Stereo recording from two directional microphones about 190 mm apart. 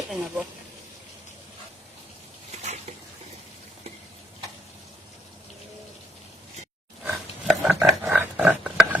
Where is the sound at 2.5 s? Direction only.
35° right (ahead or behind).